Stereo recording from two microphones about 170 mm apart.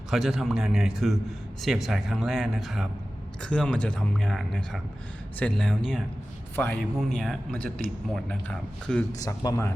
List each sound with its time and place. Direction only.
0.1 s a man's voice: centre (ahead or behind)
9.1 s speech: 20° left (ahead or behind)